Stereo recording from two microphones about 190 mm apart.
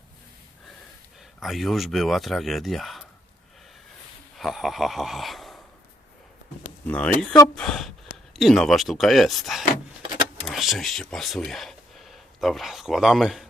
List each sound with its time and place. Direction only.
1.4 s speech: centre (ahead or behind)
4.4 s speech: centre (ahead or behind)
6.8 s speech: 5° left (ahead or behind)